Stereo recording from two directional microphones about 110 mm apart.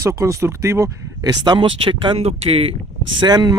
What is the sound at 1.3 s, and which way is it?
Speech, 40° right (ahead or behind).